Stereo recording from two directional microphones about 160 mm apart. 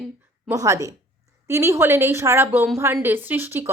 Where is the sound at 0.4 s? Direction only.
20° right (ahead or behind).